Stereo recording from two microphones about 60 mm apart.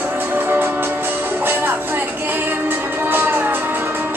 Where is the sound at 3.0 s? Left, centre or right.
Right.